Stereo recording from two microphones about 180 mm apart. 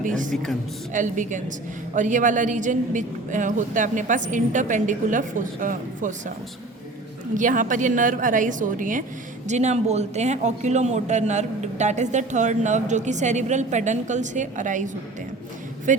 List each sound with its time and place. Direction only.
0.9 s a woman's voice: 45° right (ahead or behind)
7.3 s a woman's voice: 45° right (ahead or behind)
15.9 s a woman's voice: 45° right (ahead or behind)